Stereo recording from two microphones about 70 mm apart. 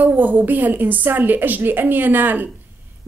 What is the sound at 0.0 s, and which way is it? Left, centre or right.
A woman's voice, right.